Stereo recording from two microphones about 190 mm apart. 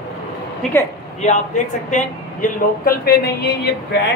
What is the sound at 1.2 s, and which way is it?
Speech, 40° left (ahead or behind).